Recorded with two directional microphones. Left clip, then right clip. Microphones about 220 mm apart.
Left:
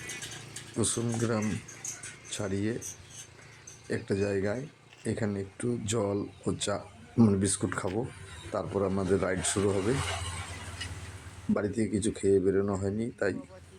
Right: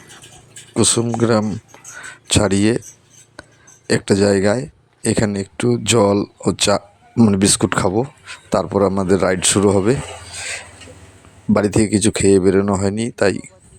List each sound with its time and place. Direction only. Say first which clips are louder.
0.8 s speech: right 15 dB; 40° right (ahead or behind)
3.8 s speech: right 16 dB; 45° right (ahead or behind)
11.5 s speech: right 15 dB; 45° right (ahead or behind)